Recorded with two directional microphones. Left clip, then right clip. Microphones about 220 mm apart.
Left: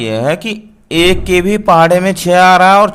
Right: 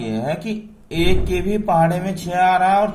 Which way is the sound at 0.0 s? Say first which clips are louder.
Left 10 dB; 55° left (ahead or behind).